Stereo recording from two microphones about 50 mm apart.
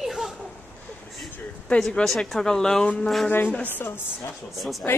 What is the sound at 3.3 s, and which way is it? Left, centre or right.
Speech, left.